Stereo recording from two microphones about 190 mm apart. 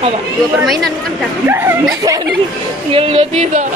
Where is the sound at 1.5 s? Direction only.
10° right (ahead or behind).